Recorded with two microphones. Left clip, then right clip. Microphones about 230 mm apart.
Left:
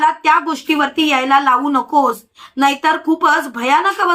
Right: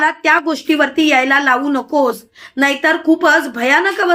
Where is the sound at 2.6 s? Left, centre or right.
Left.